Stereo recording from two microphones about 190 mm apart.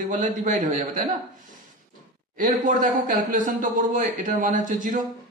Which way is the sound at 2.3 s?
45° right (ahead or behind).